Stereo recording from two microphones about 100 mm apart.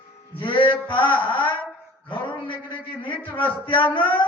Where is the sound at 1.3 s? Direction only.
55° left (ahead or behind).